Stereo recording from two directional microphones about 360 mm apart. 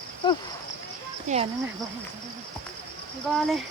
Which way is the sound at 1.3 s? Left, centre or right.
Centre.